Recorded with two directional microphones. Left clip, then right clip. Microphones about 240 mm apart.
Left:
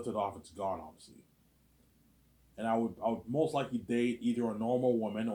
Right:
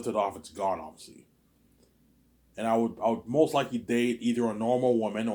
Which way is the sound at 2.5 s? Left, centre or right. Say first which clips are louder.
Right 6 dB; right.